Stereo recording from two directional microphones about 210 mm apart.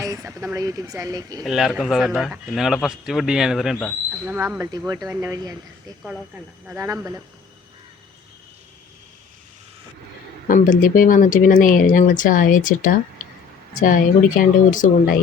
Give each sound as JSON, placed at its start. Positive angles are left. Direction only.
{"t": 0.0, "sound": "speech", "side_deg": -15}
{"t": 1.5, "sound": "speech", "side_deg": 0}
{"t": 10.5, "sound": "speech", "side_deg": 40}